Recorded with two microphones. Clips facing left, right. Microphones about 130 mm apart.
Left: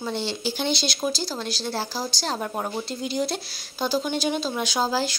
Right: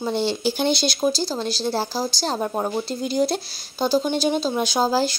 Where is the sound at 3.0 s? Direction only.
40° right (ahead or behind).